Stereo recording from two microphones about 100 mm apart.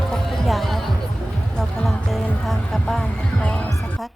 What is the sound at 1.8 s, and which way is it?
Music, centre (ahead or behind).